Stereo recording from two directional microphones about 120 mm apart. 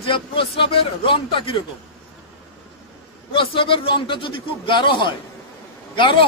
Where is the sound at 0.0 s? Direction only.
50° left (ahead or behind).